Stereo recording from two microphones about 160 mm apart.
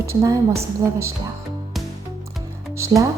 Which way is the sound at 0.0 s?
20° right (ahead or behind).